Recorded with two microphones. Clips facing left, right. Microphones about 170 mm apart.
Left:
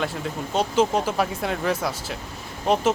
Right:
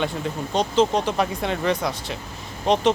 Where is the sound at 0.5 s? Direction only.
5° left (ahead or behind).